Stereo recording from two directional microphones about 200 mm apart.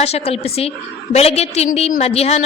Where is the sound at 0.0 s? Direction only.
30° left (ahead or behind).